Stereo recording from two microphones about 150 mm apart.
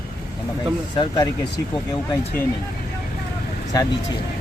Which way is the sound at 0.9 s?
25° left (ahead or behind).